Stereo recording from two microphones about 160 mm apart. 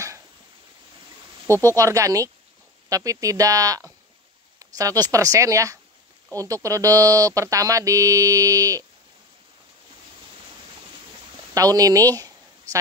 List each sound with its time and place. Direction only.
1.5 s speech: 15° left (ahead or behind)
1.8 s speech: 20° right (ahead or behind)
11.5 s speech: 20° right (ahead or behind)